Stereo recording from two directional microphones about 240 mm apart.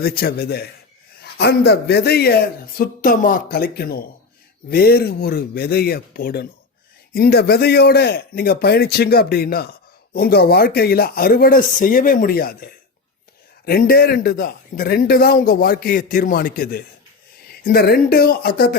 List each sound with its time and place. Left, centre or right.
0.0 s a man's voice: left